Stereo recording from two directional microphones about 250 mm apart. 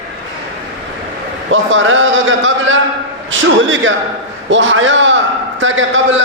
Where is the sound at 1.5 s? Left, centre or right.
Right.